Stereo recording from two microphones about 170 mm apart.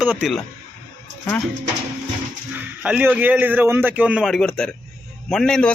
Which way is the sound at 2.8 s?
10° right (ahead or behind).